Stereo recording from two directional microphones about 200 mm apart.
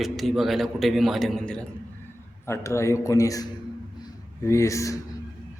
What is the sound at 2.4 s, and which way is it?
A man's voice, 15° left (ahead or behind).